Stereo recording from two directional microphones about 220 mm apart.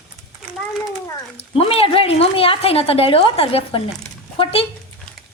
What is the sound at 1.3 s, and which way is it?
Speech, 25° left (ahead or behind).